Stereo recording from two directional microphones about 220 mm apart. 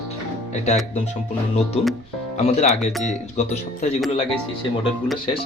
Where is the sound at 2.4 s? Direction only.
30° left (ahead or behind).